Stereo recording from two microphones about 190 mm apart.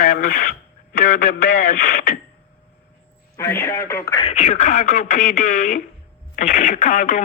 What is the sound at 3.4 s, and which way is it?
Speech, 15° left (ahead or behind).